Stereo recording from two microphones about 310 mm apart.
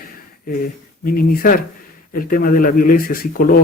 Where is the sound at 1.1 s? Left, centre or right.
Left.